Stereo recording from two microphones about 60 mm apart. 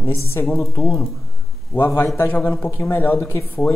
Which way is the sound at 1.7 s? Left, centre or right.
Left.